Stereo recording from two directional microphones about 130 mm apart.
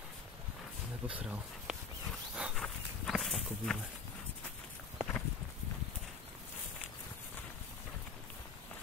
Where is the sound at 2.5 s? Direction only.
5° left (ahead or behind).